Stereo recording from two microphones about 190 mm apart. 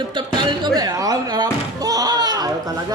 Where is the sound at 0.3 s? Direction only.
20° right (ahead or behind).